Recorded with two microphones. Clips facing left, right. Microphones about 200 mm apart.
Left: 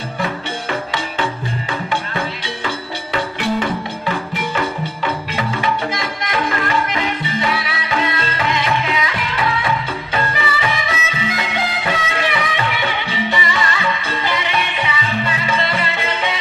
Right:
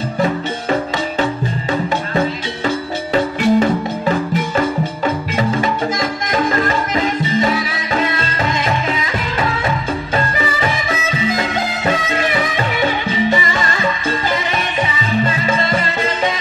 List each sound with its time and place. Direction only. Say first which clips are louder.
1.2 s music: right 4 dB; 40° right (ahead or behind)